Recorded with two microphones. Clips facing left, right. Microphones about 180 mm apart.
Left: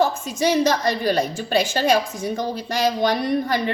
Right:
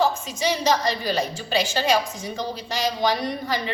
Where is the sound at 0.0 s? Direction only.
50° left (ahead or behind).